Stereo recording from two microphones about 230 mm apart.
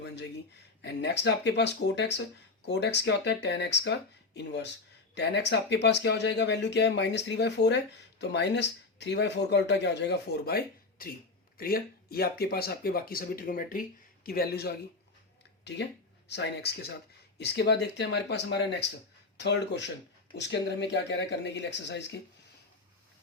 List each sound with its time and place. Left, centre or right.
0.8 s speech: left
16.3 s speech: left